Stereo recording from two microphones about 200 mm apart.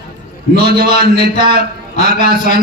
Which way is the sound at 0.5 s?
50° right (ahead or behind).